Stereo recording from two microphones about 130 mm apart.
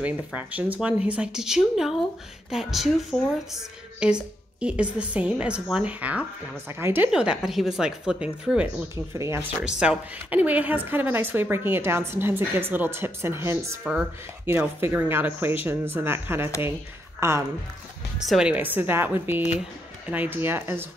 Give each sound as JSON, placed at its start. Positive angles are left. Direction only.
{"t": 0.0, "sound": "a woman's voice", "side_deg": -10}
{"t": 7.1, "sound": "speech", "side_deg": -5}
{"t": 8.9, "sound": "speech", "side_deg": -20}
{"t": 9.8, "sound": "a woman's voice", "side_deg": -10}
{"t": 18.2, "sound": "a woman's voice", "side_deg": -5}